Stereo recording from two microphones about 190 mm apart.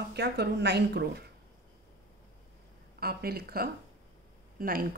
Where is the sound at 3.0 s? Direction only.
55° right (ahead or behind).